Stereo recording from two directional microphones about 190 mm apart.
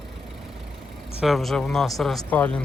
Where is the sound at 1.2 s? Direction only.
Centre (ahead or behind).